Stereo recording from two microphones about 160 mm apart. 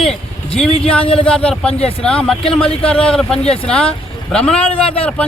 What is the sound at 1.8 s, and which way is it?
Speech, 35° left (ahead or behind).